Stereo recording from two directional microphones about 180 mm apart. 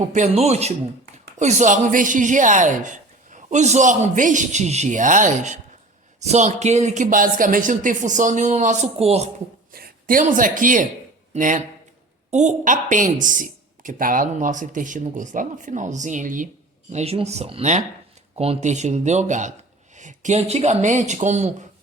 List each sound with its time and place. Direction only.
0.0 s speech: 40° right (ahead or behind)
9.7 s a woman's voice: 55° right (ahead or behind)
16.9 s speech: 35° right (ahead or behind)